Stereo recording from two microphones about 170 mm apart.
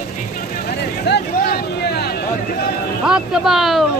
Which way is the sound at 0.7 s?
70° left (ahead or behind).